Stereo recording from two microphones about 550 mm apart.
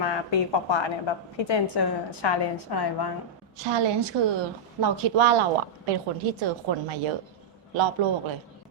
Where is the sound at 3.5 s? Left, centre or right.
Right.